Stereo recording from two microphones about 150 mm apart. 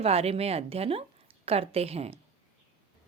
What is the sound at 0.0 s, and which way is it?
Speech, 40° right (ahead or behind).